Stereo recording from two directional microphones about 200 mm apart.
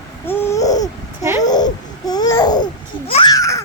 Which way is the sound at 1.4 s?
20° left (ahead or behind).